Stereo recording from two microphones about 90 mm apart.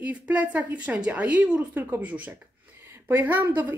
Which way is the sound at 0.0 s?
15° right (ahead or behind).